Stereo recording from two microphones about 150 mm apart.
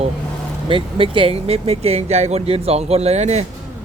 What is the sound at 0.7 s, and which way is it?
Speech, 35° right (ahead or behind).